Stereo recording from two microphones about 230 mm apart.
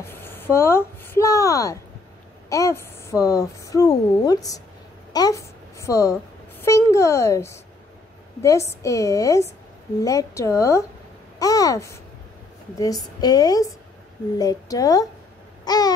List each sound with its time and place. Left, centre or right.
0.0 s a woman's voice: centre
5.1 s a sound: centre
6.6 s a woman's voice: centre
13.2 s a woman's voice: centre
15.6 s babbling: centre